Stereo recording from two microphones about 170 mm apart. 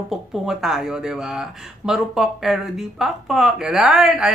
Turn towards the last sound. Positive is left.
turn(degrees=0)  # may be behind; listen again after turning